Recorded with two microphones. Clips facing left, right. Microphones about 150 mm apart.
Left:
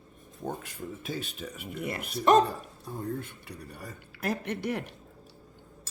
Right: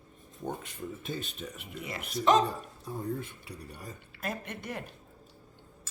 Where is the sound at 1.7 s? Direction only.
60° left (ahead or behind).